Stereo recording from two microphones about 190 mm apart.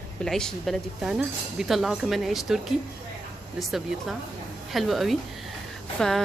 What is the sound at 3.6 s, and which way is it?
Speech, centre (ahead or behind).